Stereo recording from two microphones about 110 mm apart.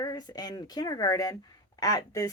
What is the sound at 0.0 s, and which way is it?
Speech, 35° left (ahead or behind).